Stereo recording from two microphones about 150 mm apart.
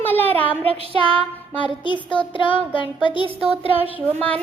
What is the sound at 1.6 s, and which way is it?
Child singing, 30° left (ahead or behind).